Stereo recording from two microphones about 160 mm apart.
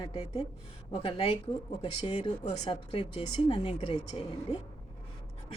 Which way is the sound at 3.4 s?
35° left (ahead or behind).